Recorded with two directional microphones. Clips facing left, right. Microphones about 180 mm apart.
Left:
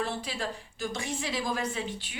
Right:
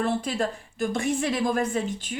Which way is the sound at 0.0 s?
50° right (ahead or behind).